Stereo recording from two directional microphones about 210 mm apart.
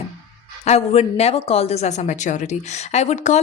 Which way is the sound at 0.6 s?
30° left (ahead or behind).